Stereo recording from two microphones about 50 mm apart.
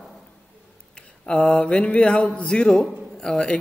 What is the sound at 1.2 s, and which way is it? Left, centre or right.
Speech, centre.